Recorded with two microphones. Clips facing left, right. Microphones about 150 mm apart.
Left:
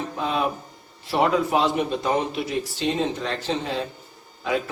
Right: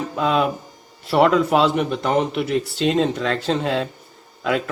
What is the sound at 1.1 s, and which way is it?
Speech, 70° right (ahead or behind).